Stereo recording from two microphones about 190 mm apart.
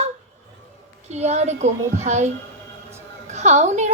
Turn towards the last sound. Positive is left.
turn(degrees=-35)  # may be behind; listen again after turning